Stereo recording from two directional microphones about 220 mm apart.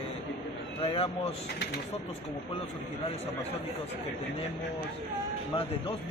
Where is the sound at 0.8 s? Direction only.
25° left (ahead or behind).